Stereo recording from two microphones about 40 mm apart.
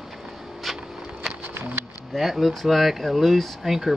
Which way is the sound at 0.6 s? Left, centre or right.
Centre.